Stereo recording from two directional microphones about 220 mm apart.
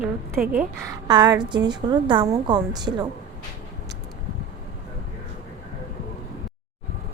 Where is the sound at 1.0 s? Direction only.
20° right (ahead or behind).